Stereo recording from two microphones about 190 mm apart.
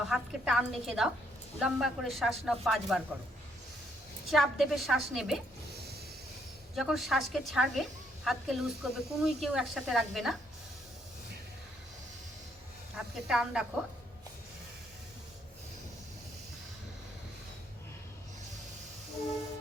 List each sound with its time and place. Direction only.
0.1 s a woman's voice: centre (ahead or behind)
4.3 s a woman's voice: centre (ahead or behind)
6.7 s a woman's voice: centre (ahead or behind)
13.0 s a woman's voice: centre (ahead or behind)